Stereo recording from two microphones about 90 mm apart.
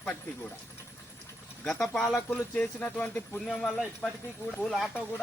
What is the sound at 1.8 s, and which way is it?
Speech, 5° left (ahead or behind).